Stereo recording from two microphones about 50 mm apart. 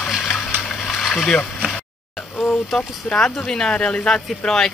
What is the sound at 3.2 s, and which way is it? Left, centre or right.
Speech, centre.